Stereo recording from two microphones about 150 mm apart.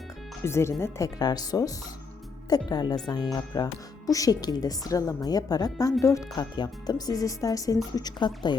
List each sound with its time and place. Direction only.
0.4 s speech: 15° left (ahead or behind)